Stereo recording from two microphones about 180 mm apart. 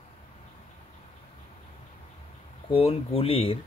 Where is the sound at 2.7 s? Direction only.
30° left (ahead or behind).